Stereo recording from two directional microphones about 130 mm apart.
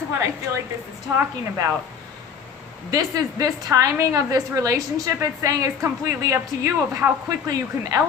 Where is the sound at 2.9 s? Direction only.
30° right (ahead or behind).